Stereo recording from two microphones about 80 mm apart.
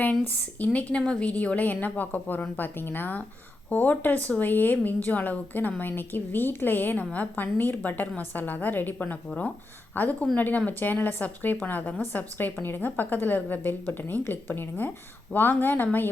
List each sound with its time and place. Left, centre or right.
0.6 s a woman's voice: centre